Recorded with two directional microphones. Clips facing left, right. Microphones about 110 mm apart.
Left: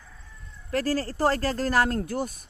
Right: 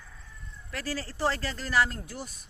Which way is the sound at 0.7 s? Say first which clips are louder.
Left 9 dB; 45° left (ahead or behind).